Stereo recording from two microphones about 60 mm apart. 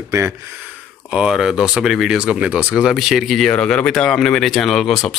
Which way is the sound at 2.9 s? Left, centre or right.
Centre.